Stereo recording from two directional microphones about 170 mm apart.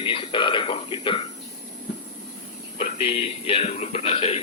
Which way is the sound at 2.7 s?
35° left (ahead or behind).